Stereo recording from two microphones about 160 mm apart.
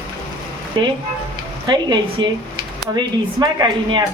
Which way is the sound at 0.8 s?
30° right (ahead or behind).